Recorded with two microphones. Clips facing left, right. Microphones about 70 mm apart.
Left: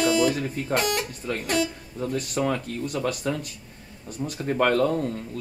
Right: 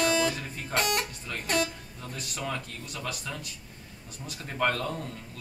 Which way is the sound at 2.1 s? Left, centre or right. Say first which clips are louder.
Left 8 dB; left.